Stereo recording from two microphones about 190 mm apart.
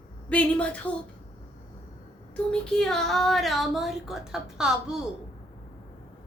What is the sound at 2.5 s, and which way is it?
Speech, 5° left (ahead or behind).